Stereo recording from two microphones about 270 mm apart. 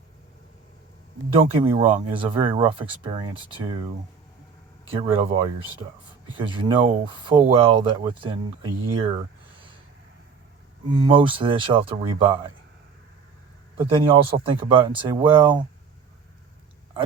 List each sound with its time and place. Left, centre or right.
1.4 s speech: centre
4.9 s speech: right
10.9 s speech: centre
13.7 s speech: centre